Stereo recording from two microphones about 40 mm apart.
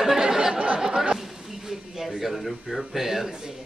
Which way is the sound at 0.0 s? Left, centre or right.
Centre.